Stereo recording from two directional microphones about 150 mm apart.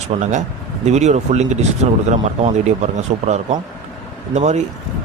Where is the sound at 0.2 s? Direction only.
55° right (ahead or behind).